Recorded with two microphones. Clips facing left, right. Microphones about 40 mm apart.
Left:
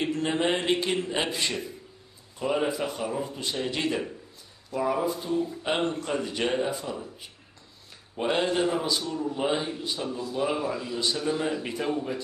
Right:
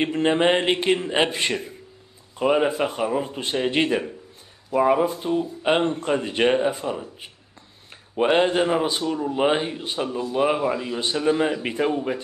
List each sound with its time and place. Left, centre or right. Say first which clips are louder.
0.0 s a man's voice: right 7 dB; right